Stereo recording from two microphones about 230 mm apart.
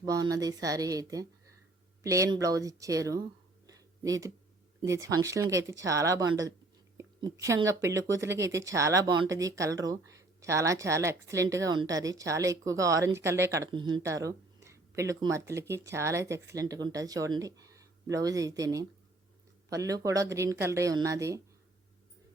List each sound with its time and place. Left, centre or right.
0.0 s speech: centre
3.7 s a sound: centre
4.8 s speech: centre